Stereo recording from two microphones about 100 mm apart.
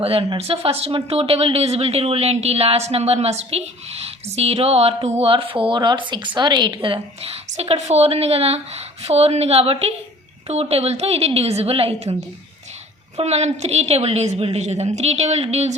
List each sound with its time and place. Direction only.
0.0 s a woman's voice: 70° right (ahead or behind); by 4.9 s 90° right
5.2 s a woman's voice: 65° right (ahead or behind)
10.5 s a woman's voice: 90° right
13.1 s speech: 90° right